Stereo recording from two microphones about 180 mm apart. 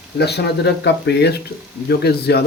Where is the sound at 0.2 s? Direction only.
70° left (ahead or behind).